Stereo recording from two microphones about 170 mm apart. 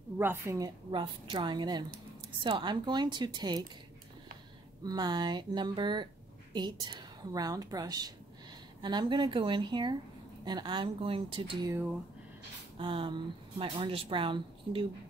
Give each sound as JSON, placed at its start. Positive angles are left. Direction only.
{"t": 0.2, "sound": "a woman's voice", "side_deg": -15}
{"t": 4.8, "sound": "a woman's voice", "side_deg": -25}
{"t": 12.7, "sound": "speech", "side_deg": -30}